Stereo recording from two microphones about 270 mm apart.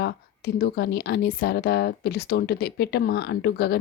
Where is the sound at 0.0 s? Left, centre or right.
Left.